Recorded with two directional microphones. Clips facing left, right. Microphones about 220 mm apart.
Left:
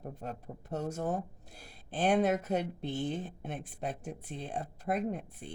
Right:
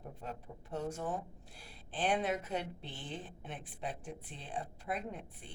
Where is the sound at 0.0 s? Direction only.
45° left (ahead or behind).